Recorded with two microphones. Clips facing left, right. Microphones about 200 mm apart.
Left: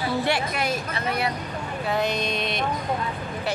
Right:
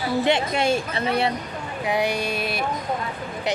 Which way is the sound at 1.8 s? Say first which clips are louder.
Right 2 dB; 10° right (ahead or behind).